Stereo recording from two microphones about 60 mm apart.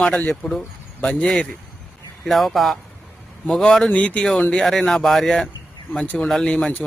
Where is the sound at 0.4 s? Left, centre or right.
Centre.